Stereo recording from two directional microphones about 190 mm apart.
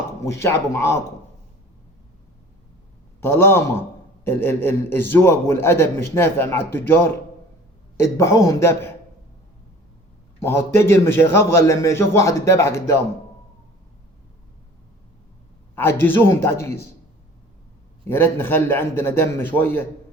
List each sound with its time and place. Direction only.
0.3 s a man's voice: 15° left (ahead or behind)
3.2 s a man's voice: 10° left (ahead or behind)
10.4 s a man's voice: 15° left (ahead or behind)
15.7 s a man's voice: 10° left (ahead or behind)
18.1 s a man's voice: 10° left (ahead or behind)